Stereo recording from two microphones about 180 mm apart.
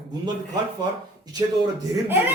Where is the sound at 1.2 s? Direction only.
20° right (ahead or behind).